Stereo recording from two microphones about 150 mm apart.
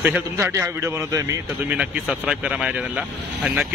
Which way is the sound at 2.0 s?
5° right (ahead or behind).